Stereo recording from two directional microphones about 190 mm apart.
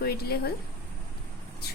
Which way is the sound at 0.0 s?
55° left (ahead or behind).